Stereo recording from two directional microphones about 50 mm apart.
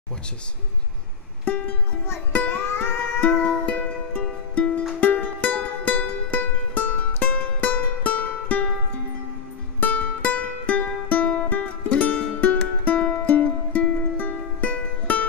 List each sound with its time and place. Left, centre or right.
2.3 s music: left
4.2 s music: left
5.0 s music: left
9.8 s music: left
11.9 s music: left